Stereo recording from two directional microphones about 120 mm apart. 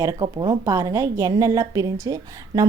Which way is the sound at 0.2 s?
40° right (ahead or behind).